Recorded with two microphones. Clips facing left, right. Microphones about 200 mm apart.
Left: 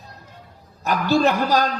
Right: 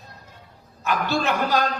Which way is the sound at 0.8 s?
35° left (ahead or behind).